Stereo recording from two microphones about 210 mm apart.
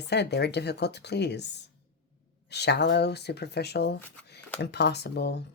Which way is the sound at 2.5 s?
50° left (ahead or behind).